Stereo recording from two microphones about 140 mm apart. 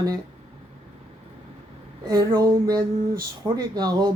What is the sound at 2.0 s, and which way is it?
Speech, 25° right (ahead or behind).